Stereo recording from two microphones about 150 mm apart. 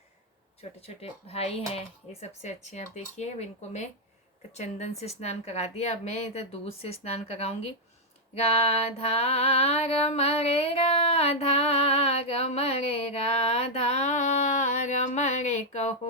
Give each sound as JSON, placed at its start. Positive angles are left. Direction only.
{"t": 0.8, "sound": "speech", "side_deg": 45}
{"t": 8.4, "sound": "mantra", "side_deg": 45}